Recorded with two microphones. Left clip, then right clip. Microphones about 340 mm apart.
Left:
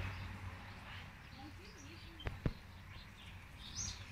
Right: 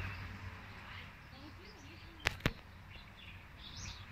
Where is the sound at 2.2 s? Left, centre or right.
Right.